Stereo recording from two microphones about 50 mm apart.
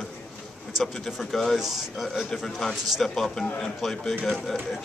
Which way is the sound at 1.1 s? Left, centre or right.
Centre.